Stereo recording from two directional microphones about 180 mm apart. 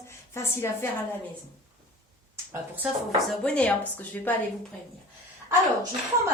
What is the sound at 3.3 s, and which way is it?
Speech, 5° left (ahead or behind).